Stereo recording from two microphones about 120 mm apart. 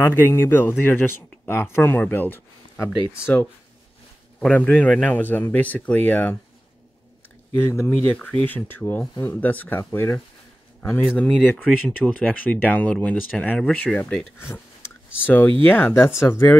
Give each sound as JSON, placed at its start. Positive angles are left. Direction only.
{"t": 0.0, "sound": "speech", "side_deg": 20}
{"t": 4.4, "sound": "speech", "side_deg": 10}
{"t": 7.5, "sound": "speech", "side_deg": 20}
{"t": 14.4, "sound": "a sound", "side_deg": 25}
{"t": 15.6, "sound": "speech", "side_deg": 15}